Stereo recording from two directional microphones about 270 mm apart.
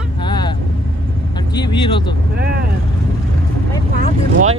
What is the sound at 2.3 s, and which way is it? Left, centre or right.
Speech, right.